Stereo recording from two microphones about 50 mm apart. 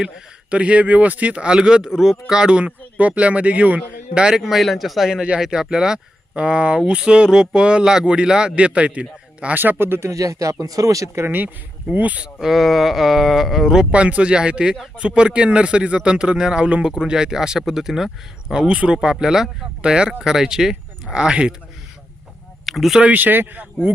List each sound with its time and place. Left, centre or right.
0.5 s speech: right
4.1 s speech: centre
9.6 s speech: right
10.0 s speech: right
11.3 s speech: right
12.4 s speech: centre
13.9 s speech: right; by 18.7 s centre
18.7 s speech: centre
19.2 s speech: centre
22.6 s a sound: centre
23.0 s speech: right